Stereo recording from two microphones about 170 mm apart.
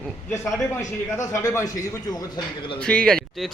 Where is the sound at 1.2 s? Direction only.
20° left (ahead or behind).